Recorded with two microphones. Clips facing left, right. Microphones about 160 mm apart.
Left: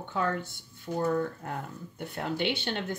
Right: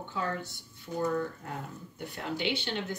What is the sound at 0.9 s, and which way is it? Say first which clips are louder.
A woman's voice: left 2 dB; 45° left (ahead or behind).